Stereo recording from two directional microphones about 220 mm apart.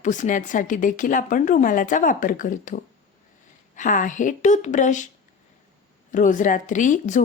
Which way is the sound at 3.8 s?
35° left (ahead or behind).